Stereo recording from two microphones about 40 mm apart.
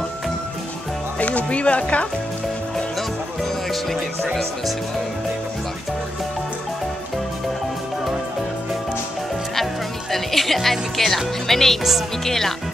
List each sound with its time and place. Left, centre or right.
1.2 s speech: left
10.1 s speech: centre